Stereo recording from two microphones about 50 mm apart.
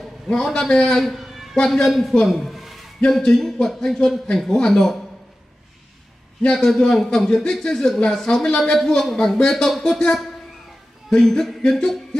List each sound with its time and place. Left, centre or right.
0.3 s music: centre
1.0 s a sound: centre
1.5 s music: centre
1.9 s a man's voice: centre
2.2 s a sound: centre
3.1 s music: centre
6.4 s music: centre